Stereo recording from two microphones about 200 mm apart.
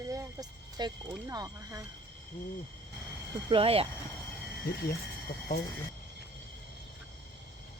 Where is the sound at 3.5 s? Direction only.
30° right (ahead or behind).